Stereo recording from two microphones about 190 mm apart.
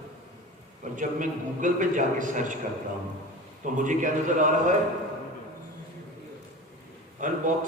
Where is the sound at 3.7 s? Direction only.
40° right (ahead or behind).